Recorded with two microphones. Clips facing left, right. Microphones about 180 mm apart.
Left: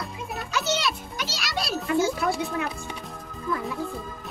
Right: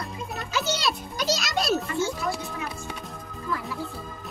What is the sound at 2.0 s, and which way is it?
Speech, 70° left (ahead or behind).